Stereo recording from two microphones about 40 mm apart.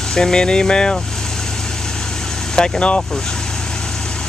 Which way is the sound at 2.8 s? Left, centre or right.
Left.